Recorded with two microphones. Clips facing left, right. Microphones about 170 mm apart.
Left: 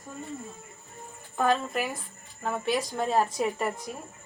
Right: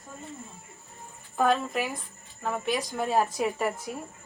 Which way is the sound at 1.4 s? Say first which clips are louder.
Right 1 dB; centre (ahead or behind).